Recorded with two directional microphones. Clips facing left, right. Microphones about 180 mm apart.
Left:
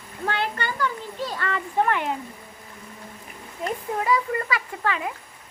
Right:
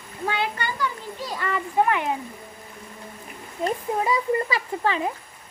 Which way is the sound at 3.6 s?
25° right (ahead or behind).